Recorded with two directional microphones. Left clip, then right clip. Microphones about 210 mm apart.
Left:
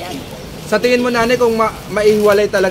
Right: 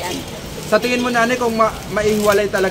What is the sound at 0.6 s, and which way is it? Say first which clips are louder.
A man's voice: left 3 dB; 40° left (ahead or behind).